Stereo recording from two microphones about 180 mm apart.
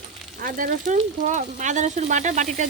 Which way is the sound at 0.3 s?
50° right (ahead or behind).